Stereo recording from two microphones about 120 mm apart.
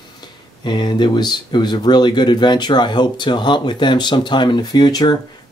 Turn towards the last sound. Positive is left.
turn(degrees=35)  # may be behind; listen again after turning